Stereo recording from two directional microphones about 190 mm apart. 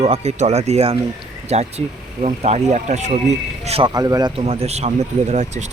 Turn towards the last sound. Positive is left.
turn(degrees=-40)  # may be behind; listen again after turning